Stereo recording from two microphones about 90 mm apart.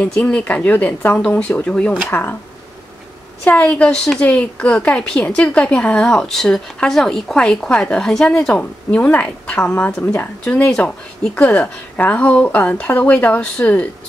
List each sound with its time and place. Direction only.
0.0 s a woman's voice: 15° left (ahead or behind)
3.4 s a woman's voice: 15° left (ahead or behind)